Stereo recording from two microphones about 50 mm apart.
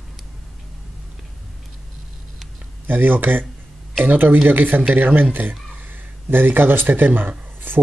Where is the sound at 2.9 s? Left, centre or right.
Right.